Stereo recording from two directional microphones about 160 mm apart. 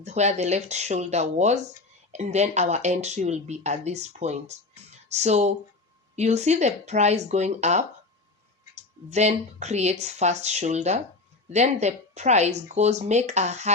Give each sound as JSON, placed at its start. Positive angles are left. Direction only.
{"t": 0.0, "sound": "speech", "side_deg": -45}